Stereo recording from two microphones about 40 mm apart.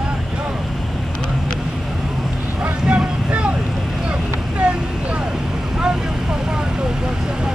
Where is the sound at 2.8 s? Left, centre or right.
Right.